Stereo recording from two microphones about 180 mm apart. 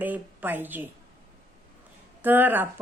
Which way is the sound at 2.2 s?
10° right (ahead or behind).